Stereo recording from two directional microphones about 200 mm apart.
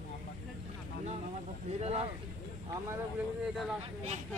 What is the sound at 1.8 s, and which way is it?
Speech, 30° right (ahead or behind).